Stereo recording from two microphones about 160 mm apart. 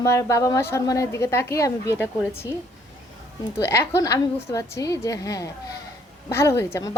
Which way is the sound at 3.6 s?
15° left (ahead or behind).